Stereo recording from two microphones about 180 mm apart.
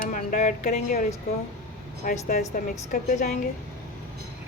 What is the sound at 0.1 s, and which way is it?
Speech, 45° left (ahead or behind).